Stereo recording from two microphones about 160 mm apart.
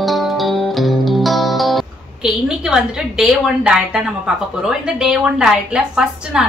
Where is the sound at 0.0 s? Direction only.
Centre (ahead or behind).